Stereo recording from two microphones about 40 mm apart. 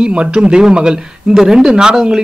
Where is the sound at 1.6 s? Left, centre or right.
Centre.